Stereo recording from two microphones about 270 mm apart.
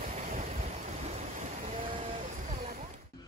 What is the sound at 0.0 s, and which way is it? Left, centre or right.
Vehicle, right.